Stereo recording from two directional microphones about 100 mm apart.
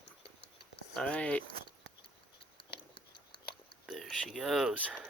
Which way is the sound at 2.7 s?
60° left (ahead or behind).